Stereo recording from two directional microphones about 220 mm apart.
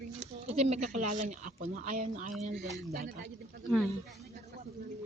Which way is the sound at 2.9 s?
50° right (ahead or behind).